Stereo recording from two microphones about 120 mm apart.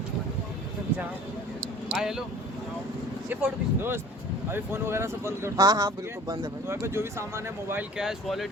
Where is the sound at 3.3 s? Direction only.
15° right (ahead or behind).